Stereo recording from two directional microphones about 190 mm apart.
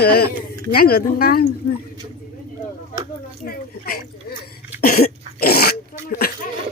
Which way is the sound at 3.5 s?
50° left (ahead or behind).